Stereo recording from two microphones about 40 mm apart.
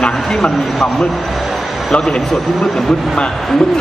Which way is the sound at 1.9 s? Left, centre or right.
Centre.